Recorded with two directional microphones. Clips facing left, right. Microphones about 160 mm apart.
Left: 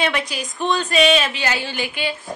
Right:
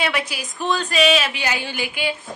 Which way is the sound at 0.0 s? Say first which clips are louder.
Left 2 dB; 5° right (ahead or behind).